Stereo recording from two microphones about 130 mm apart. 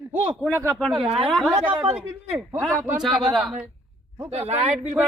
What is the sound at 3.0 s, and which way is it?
Speech, centre (ahead or behind).